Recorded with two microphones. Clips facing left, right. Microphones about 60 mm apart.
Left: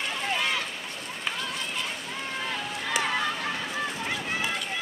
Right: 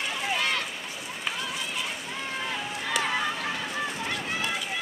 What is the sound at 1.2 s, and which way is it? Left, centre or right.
Run, centre.